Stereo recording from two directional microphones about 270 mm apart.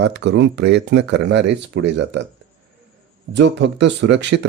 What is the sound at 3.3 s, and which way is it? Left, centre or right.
Speech, right.